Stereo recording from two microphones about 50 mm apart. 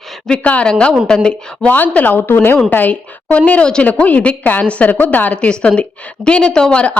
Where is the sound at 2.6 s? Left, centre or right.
Left.